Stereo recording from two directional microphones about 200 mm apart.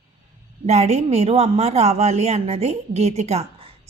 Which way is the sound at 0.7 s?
35° right (ahead or behind).